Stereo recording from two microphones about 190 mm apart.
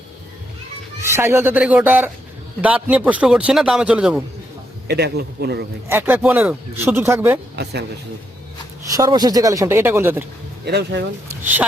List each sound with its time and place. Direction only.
1.0 s a man's voice: 15° right (ahead or behind)
4.9 s a man's voice: 60° right (ahead or behind)
5.9 s a man's voice: 10° right (ahead or behind)
7.5 s a man's voice: 60° right (ahead or behind)
8.9 s a man's voice: 20° right (ahead or behind)
10.7 s a man's voice: 60° right (ahead or behind)